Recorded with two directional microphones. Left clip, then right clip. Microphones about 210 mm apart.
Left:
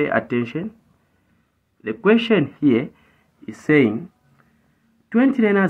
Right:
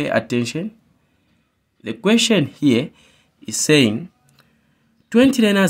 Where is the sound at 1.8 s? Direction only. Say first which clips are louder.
Even; 55° right (ahead or behind); by 3.9 s 70° right (ahead or behind).